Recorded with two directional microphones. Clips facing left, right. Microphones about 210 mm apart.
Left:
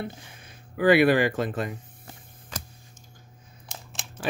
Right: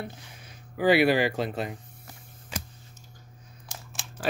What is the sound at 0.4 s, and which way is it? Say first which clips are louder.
Speech: left 2 dB; 55° left (ahead or behind).